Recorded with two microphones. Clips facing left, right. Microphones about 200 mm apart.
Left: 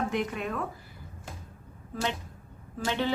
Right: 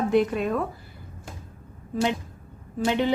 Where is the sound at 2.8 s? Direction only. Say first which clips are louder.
Right 6 dB; 15° right (ahead or behind).